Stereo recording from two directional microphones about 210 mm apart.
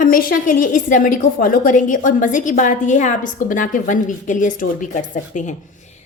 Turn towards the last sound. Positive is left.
turn(degrees=35)  # may be behind; listen again after turning